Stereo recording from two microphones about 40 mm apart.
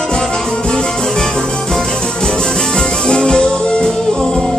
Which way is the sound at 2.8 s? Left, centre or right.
Centre.